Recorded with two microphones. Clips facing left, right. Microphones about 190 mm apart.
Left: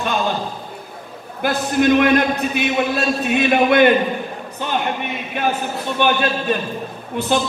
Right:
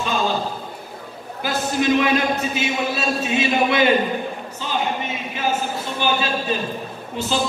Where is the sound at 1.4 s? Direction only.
60° left (ahead or behind).